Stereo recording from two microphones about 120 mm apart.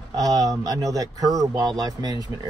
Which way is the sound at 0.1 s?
30° right (ahead or behind).